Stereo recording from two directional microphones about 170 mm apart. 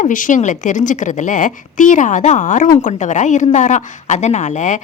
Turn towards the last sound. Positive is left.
turn(degrees=45)  # may be behind; listen again after turning